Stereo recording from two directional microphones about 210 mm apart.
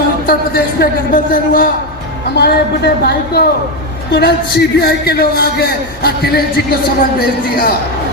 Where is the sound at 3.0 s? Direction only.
50° left (ahead or behind).